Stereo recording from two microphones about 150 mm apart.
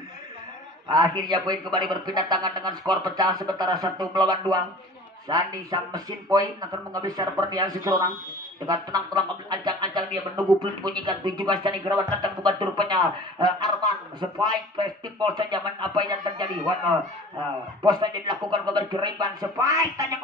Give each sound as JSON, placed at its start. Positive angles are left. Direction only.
{"t": 0.8, "sound": "a man's voice", "side_deg": -25}
{"t": 17.8, "sound": "a man's voice", "side_deg": -25}